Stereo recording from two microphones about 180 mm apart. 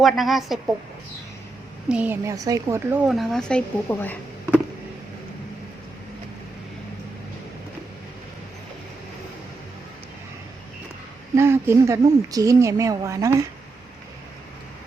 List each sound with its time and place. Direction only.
0.0 s a woman's voice: centre (ahead or behind)
1.9 s a woman's voice: 10° right (ahead or behind)
3.1 s a woman's voice: centre (ahead or behind)
11.3 s a woman's voice: 15° right (ahead or behind)